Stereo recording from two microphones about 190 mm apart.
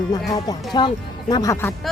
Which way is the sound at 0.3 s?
20° left (ahead or behind).